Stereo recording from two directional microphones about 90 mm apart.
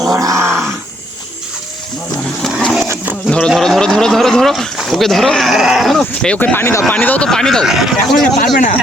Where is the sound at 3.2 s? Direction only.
10° left (ahead or behind).